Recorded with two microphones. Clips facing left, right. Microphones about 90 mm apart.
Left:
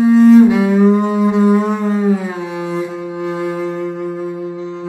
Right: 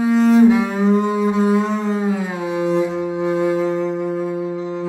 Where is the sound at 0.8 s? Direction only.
20° left (ahead or behind).